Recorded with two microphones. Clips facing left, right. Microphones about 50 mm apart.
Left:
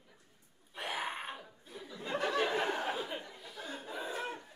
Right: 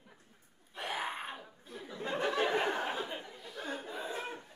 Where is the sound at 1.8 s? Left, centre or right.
Right.